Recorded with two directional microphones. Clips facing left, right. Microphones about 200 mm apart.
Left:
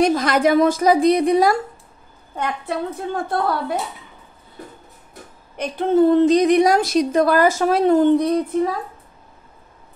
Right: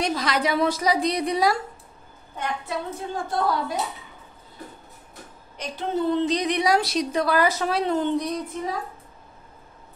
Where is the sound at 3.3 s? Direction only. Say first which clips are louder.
Left 1 dB; 60° left (ahead or behind).